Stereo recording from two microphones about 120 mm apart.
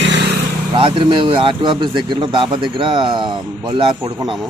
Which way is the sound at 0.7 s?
50° right (ahead or behind).